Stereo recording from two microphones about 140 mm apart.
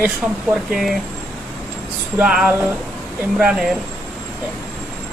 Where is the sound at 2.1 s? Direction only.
5° right (ahead or behind).